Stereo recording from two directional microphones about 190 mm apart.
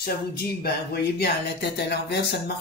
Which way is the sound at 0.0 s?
55° left (ahead or behind).